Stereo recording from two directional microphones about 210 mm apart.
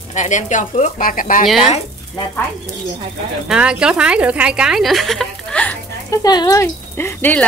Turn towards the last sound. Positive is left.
turn(degrees=10)  # may be behind; listen again after turning